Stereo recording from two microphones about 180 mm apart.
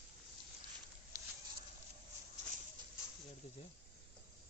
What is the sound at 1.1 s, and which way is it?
Fowl, 20° right (ahead or behind).